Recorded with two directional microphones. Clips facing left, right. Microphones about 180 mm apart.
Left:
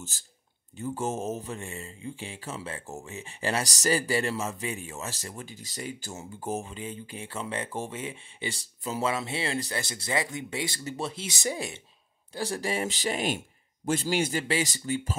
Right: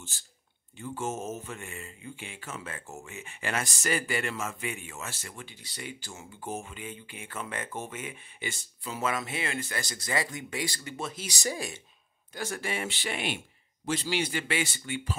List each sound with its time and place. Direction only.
0.7 s a man's voice: 40° left (ahead or behind); by 11.8 s 20° left (ahead or behind)
12.4 s a man's voice: 35° left (ahead or behind)